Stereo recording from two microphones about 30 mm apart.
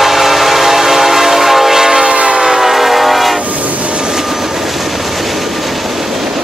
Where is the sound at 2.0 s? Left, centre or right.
Right.